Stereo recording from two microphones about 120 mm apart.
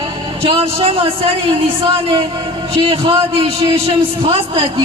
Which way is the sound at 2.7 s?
45° right (ahead or behind).